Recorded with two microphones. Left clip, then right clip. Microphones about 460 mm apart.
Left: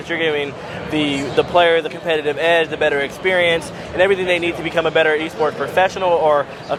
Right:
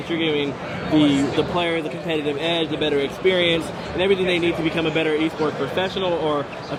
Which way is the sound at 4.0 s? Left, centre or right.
Left.